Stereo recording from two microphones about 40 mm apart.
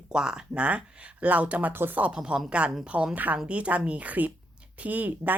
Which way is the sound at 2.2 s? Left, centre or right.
Right.